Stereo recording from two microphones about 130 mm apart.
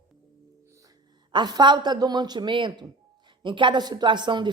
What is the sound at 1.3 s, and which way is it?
A woman's voice, 35° right (ahead or behind).